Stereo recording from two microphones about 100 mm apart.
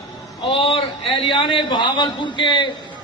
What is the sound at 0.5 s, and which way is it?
A man's voice, 65° left (ahead or behind).